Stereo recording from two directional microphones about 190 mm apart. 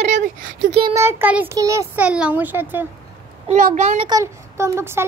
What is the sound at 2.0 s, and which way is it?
Speech, 5° right (ahead or behind).